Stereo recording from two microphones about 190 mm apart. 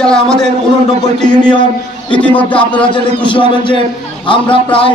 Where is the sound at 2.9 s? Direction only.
25° left (ahead or behind).